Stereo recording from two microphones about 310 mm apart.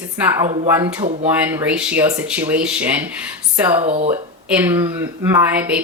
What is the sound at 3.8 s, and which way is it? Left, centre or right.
Speech, centre.